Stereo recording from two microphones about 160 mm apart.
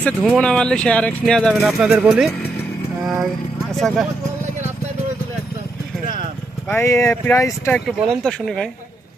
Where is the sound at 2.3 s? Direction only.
10° left (ahead or behind).